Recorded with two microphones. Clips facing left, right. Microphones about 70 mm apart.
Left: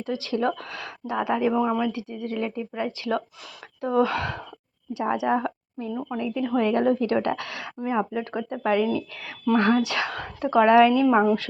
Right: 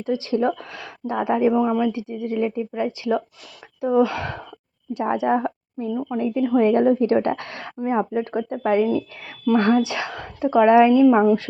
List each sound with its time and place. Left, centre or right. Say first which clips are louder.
0.0 s speech: right 4 dB; right
1.5 s speech: right 5 dB; centre
1.9 s speech: right 4 dB; right
4.9 s a woman's voice: right 3 dB; right
5.9 s speech: right 4 dB; centre
6.1 s a woman's voice: right 5 dB; right
9.5 s speech: right 3 dB; centre
9.8 s speech: even; centre
11.0 s speech: right 5 dB; centre